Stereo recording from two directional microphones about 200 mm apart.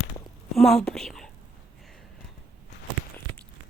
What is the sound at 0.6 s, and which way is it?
Speech, centre (ahead or behind).